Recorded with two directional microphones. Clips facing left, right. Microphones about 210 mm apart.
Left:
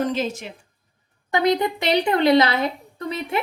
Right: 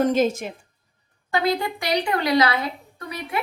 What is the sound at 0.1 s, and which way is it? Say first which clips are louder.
Speech: right 5 dB; 45° right (ahead or behind).